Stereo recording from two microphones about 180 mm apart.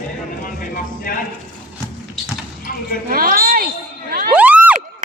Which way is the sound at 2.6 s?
55° left (ahead or behind).